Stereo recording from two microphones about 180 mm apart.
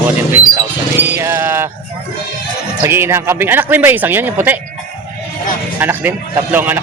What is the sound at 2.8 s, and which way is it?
Speech, 15° right (ahead or behind).